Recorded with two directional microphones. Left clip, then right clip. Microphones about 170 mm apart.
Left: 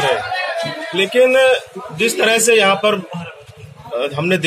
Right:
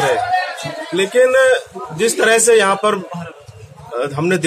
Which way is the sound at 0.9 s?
15° right (ahead or behind).